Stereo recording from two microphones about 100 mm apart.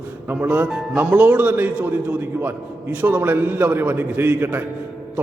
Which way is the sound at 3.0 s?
20° right (ahead or behind).